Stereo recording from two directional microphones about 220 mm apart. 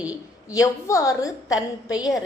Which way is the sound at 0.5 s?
15° left (ahead or behind).